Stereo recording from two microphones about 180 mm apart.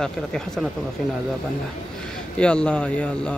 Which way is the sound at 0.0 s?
5° left (ahead or behind).